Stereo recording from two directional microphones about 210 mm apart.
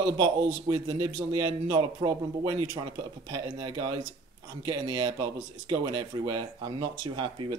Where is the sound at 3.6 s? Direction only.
20° right (ahead or behind).